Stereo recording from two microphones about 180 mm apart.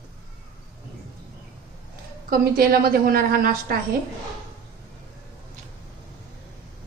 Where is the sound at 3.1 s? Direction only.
55° right (ahead or behind).